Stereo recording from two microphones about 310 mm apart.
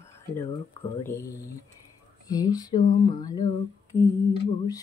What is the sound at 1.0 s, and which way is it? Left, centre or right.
Speech, centre.